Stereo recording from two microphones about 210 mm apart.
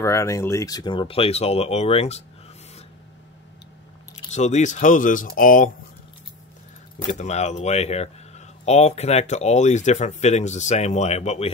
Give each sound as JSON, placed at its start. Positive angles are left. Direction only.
{"t": 0.0, "sound": "speech", "side_deg": 15}
{"t": 4.3, "sound": "speech", "side_deg": 35}
{"t": 7.1, "sound": "speech", "side_deg": 35}